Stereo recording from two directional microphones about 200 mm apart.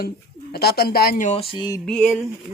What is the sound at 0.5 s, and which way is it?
Speech, 55° left (ahead or behind).